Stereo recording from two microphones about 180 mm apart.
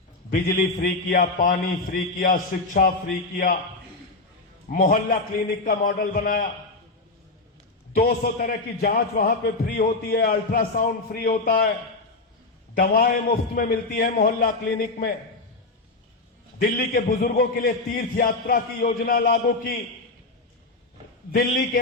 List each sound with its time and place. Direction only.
0.3 s a man's voice: 55° left (ahead or behind)
4.7 s a man's voice: 50° left (ahead or behind)
7.9 s a man's voice: 55° left (ahead or behind)
12.7 s a man's voice: 50° left (ahead or behind)
16.6 s a man's voice: 55° left (ahead or behind)
21.3 s a man's voice: 55° left (ahead or behind)